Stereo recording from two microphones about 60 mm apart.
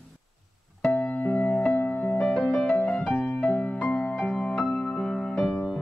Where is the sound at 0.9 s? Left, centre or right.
Left.